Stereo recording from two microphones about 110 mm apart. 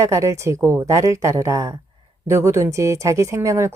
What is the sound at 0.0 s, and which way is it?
Speech, 30° right (ahead or behind).